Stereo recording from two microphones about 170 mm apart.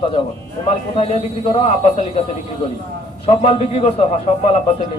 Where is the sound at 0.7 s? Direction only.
40° left (ahead or behind).